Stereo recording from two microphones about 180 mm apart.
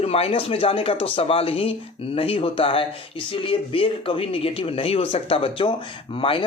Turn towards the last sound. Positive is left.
turn(degrees=30)  # may be behind; listen again after turning